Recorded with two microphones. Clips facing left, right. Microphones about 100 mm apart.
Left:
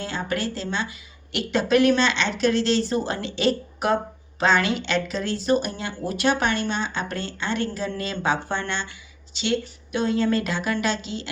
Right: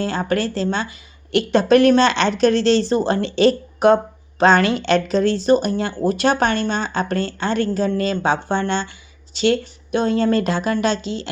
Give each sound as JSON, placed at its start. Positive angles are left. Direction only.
{"t": 0.0, "sound": "a woman's voice", "side_deg": -40}
{"t": 9.9, "sound": "speech", "side_deg": -35}